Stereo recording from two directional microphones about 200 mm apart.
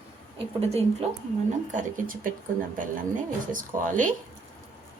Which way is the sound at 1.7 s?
45° right (ahead or behind).